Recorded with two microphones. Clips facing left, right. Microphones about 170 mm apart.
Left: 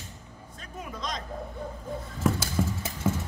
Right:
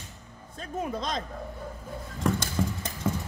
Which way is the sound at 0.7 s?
30° right (ahead or behind).